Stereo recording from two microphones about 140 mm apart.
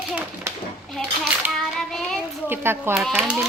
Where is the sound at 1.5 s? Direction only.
5° left (ahead or behind).